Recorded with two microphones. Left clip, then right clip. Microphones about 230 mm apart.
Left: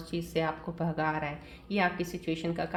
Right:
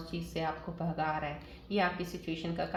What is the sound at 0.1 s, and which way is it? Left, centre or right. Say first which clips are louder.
Speech: left 5 dB; left.